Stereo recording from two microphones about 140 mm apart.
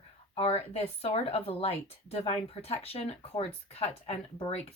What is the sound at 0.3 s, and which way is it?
Speech, 45° left (ahead or behind).